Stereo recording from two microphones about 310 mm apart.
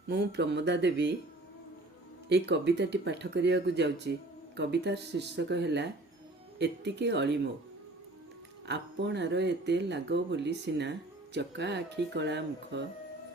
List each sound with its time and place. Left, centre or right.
0.1 s speech: right
2.3 s speech: right
8.6 s speech: right